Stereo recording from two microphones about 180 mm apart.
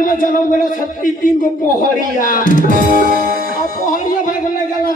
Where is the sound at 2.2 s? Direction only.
45° left (ahead or behind).